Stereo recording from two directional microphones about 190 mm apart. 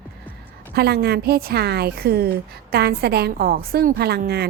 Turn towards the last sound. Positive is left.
turn(degrees=-55)  # may be behind; listen again after turning